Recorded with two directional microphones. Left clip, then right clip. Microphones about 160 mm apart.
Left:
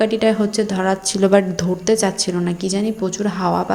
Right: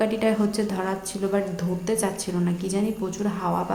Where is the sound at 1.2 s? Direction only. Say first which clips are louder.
Left 11 dB; 45° left (ahead or behind).